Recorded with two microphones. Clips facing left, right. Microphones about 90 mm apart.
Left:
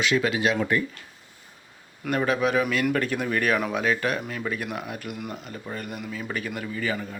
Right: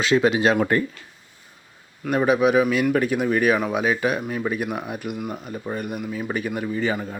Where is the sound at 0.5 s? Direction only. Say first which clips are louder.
Right 4 dB; 45° right (ahead or behind).